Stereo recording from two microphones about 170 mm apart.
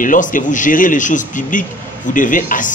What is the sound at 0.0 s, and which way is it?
A man's voice, 50° left (ahead or behind).